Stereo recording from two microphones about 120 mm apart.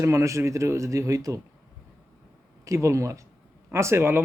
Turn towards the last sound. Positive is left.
turn(degrees=-20)  # may be behind; listen again after turning